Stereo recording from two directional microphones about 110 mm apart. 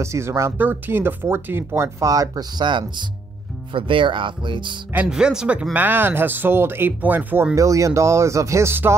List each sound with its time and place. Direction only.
0.0 s speech: 25° right (ahead or behind); by 4.7 s 45° right (ahead or behind)
5.1 s speech: 5° right (ahead or behind)
7.5 s speech: 30° right (ahead or behind)